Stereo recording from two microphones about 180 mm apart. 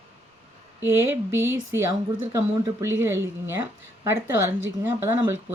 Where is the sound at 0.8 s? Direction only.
15° right (ahead or behind).